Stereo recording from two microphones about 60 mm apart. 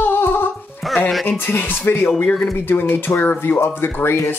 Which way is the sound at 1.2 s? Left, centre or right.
Left.